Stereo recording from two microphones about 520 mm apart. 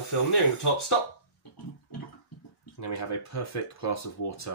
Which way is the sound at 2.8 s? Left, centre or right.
Left.